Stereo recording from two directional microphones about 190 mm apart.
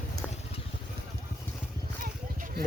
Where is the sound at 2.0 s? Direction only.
45° right (ahead or behind).